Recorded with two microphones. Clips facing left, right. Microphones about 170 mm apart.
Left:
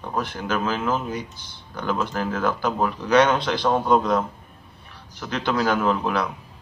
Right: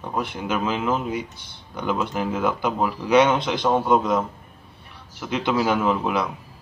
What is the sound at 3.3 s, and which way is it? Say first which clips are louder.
Speech: even; 20° right (ahead or behind).